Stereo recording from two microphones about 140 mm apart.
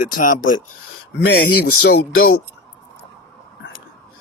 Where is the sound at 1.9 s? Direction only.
90° left.